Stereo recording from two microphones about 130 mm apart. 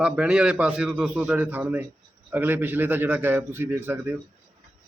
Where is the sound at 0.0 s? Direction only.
5° right (ahead or behind).